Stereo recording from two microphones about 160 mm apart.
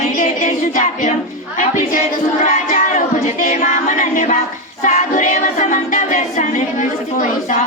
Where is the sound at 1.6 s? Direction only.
50° left (ahead or behind).